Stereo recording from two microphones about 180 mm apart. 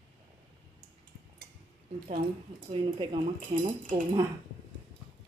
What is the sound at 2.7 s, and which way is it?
Speech, 30° right (ahead or behind).